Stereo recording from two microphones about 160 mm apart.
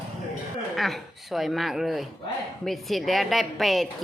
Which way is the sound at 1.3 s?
Centre (ahead or behind).